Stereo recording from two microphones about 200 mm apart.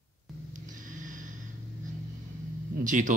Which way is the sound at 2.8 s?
40° right (ahead or behind).